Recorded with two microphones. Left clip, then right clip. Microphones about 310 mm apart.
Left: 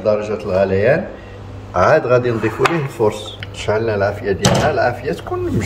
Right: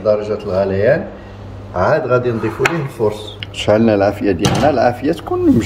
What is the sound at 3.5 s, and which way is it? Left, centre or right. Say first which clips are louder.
Speech: right 5 dB; right.